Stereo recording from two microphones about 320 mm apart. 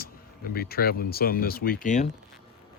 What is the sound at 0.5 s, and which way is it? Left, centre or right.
Speech, left.